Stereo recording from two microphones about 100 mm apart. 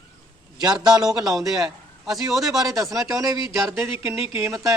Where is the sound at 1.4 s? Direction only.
5° right (ahead or behind).